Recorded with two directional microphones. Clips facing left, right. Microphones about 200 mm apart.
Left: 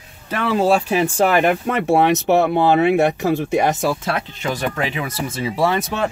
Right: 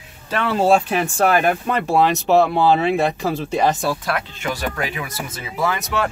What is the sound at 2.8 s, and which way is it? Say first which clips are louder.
Speech: left 3 dB; 20° left (ahead or behind).